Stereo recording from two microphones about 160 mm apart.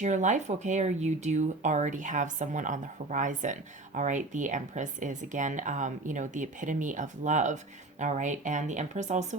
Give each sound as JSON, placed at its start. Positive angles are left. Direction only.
{"t": 0.0, "sound": "speech", "side_deg": -50}